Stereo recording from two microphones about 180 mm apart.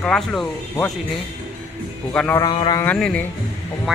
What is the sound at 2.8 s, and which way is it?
Music, 5° left (ahead or behind).